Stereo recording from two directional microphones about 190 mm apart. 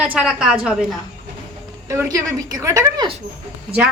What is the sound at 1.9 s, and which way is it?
A woman's voice, 15° right (ahead or behind).